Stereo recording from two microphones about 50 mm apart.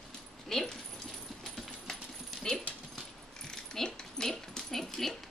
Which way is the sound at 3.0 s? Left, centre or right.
Centre.